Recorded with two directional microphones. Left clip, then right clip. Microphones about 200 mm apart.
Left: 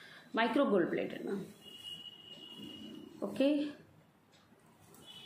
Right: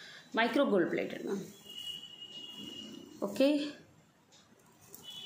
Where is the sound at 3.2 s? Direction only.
20° right (ahead or behind).